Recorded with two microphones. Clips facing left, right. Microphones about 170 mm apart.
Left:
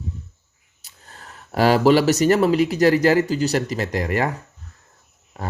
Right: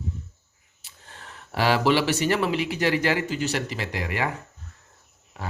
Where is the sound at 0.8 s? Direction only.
40° left (ahead or behind).